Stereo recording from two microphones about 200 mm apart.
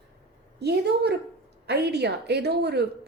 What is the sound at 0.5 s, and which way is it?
Speech, 55° right (ahead or behind).